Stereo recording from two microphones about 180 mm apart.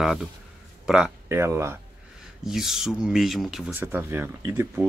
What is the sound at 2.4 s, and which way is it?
Speech, 5° right (ahead or behind).